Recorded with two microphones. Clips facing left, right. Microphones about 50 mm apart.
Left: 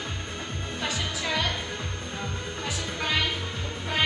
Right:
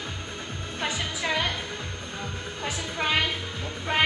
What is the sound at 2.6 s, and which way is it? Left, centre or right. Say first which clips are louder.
Music: right 3 dB; right.